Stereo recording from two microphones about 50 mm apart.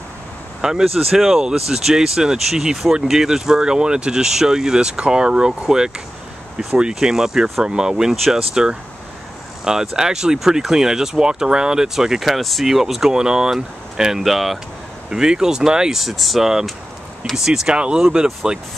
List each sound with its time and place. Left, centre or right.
0.6 s speech: centre
15.0 s speech: centre
16.0 s speech: centre